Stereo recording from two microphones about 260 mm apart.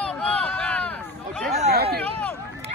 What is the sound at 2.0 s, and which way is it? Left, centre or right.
Run, centre.